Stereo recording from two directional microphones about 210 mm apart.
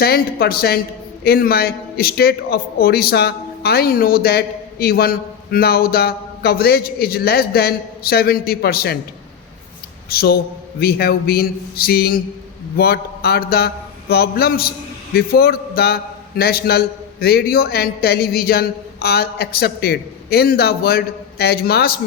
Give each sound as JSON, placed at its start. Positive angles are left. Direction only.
{"t": 0.0, "sound": "a man's voice", "side_deg": 50}
{"t": 10.1, "sound": "a man's voice", "side_deg": 45}